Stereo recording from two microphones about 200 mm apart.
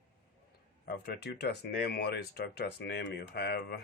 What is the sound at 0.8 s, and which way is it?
Speech, 55° left (ahead or behind).